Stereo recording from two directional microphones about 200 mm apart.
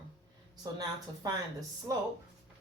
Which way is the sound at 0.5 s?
20° right (ahead or behind).